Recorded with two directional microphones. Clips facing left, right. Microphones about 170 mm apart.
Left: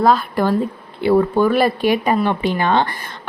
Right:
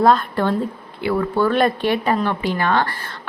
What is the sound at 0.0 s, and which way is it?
Speech, 5° left (ahead or behind).